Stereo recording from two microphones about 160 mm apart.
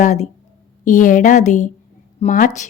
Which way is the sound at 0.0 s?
50° left (ahead or behind).